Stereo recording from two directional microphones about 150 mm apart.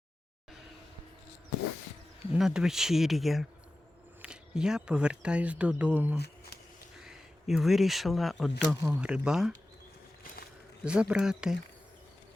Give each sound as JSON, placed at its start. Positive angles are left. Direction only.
{"t": 2.3, "sound": "speech", "side_deg": -5}
{"t": 6.1, "sound": "a sound", "side_deg": 90}
{"t": 7.0, "sound": "speech", "side_deg": -5}
{"t": 8.8, "sound": "speech", "side_deg": -10}
{"t": 10.8, "sound": "speech", "side_deg": -5}